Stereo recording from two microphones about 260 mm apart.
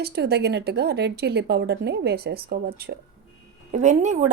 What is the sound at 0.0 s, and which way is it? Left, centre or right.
Speech, right.